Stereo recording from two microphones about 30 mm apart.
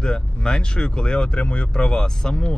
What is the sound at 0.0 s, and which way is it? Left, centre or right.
Speech, left.